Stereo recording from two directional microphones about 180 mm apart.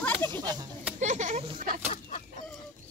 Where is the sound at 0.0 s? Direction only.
10° left (ahead or behind).